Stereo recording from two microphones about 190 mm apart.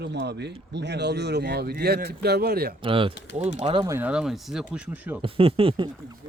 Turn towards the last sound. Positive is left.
turn(degrees=-30)  # may be behind; listen again after turning